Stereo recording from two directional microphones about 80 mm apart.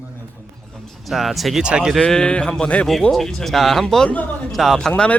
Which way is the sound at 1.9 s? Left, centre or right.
Centre.